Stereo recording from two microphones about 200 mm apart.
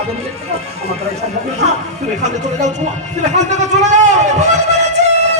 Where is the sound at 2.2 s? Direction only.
35° right (ahead or behind).